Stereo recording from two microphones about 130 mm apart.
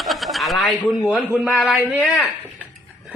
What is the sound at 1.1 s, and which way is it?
Speech, 15° right (ahead or behind).